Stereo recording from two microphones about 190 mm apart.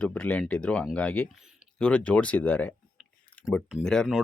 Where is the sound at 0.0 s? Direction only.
5° left (ahead or behind).